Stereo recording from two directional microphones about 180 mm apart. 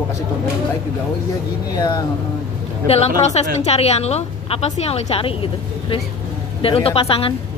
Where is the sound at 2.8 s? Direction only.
35° left (ahead or behind).